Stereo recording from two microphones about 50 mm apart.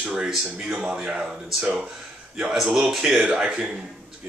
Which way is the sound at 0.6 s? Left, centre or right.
Right.